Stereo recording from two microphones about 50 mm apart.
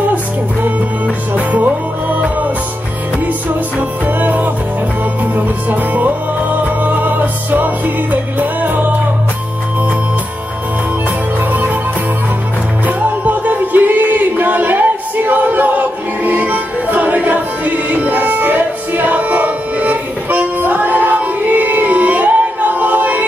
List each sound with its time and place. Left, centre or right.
0.1 s music: right
4.0 s music: right
12.8 s music: right